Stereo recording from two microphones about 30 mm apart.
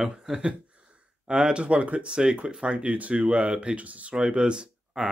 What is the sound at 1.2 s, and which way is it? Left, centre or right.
Speech, right.